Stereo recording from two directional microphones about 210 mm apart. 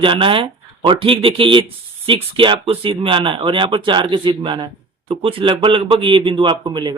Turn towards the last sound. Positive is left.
turn(degrees=-20)  # may be behind; listen again after turning